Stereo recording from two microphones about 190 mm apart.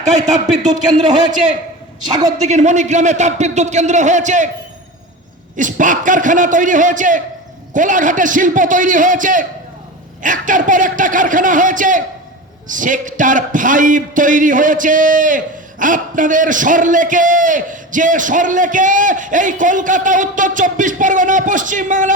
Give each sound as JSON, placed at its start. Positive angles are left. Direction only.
{"t": 0.0, "sound": "a man's voice", "side_deg": -40}
{"t": 2.4, "sound": "a man's voice", "side_deg": -40}
{"t": 5.5, "sound": "a man's voice", "side_deg": -40}